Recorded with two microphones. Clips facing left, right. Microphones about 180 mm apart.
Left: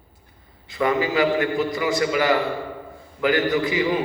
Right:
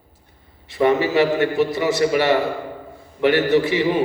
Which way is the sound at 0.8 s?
25° right (ahead or behind).